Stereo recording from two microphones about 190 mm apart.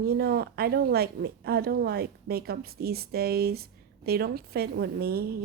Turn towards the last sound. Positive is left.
turn(degrees=-55)  # may be behind; listen again after turning